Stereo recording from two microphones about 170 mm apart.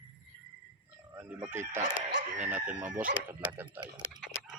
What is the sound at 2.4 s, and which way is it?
Chicken, 10° right (ahead or behind).